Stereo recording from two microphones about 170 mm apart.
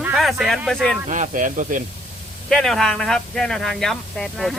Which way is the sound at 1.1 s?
50° right (ahead or behind).